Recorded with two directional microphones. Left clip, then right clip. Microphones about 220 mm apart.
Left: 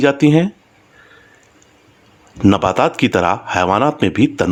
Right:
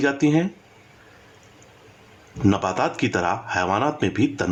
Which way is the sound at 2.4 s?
30° left (ahead or behind).